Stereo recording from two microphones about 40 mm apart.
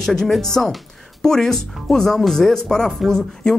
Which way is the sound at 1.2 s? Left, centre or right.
Centre.